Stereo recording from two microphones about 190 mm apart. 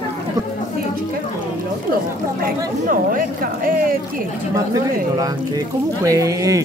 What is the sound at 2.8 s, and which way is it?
Speech, 45° right (ahead or behind).